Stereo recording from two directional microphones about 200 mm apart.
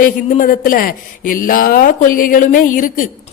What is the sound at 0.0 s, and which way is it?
Speech, 40° left (ahead or behind).